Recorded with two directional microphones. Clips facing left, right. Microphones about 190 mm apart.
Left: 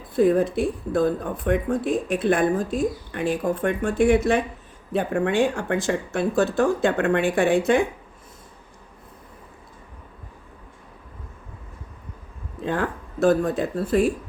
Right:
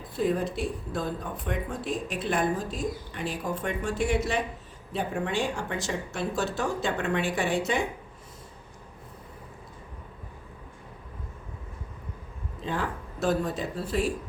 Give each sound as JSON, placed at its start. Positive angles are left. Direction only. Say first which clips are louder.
{"t": 0.2, "sound": "speech", "louder": "left 8 dB", "side_deg": 55}
{"t": 12.6, "sound": "speech", "louder": "left 6 dB", "side_deg": 55}